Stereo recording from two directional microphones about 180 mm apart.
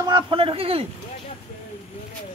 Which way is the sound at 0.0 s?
25° right (ahead or behind).